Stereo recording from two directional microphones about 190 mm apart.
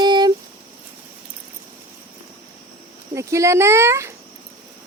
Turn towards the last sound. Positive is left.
turn(degrees=-15)  # may be behind; listen again after turning